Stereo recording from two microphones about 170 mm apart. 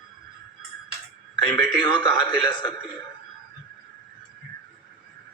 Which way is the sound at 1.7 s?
25° left (ahead or behind).